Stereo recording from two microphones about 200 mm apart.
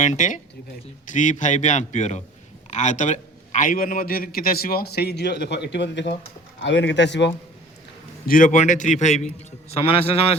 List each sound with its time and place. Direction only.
0.0 s a man's voice: 40° left (ahead or behind); by 7.3 s 60° left (ahead or behind)
8.3 s a man's voice: 40° left (ahead or behind)